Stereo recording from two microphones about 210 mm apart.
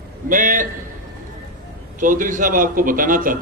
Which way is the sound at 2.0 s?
40° right (ahead or behind).